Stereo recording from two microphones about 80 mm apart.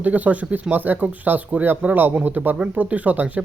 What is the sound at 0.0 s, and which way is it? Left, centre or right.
A man's voice, centre.